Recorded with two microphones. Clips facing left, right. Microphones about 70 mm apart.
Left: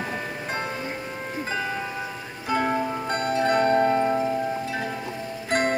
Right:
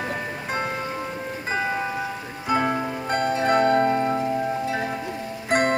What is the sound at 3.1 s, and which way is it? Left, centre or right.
Music, right.